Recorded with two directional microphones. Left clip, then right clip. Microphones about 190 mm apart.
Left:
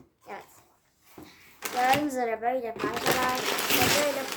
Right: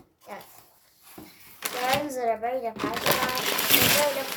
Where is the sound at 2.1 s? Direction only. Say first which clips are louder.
Right 1 dB; 30° left (ahead or behind).